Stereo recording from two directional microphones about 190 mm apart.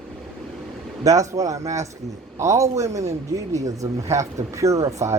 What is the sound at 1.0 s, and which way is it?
Speech, 15° right (ahead or behind).